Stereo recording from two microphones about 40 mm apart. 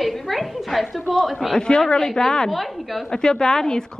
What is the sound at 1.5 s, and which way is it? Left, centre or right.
Speech, left.